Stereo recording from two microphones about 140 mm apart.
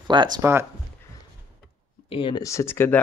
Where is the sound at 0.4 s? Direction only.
15° right (ahead or behind).